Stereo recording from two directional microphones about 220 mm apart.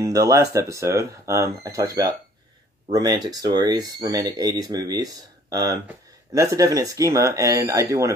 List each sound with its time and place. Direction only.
0.0 s speech: 15° right (ahead or behind)